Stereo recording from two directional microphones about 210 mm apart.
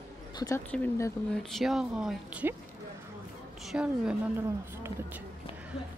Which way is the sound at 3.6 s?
5° right (ahead or behind).